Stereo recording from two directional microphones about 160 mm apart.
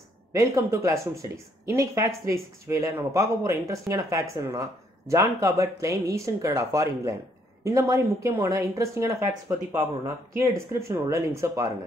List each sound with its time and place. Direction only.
0.3 s speech: 20° right (ahead or behind)
10.3 s speech: 20° right (ahead or behind)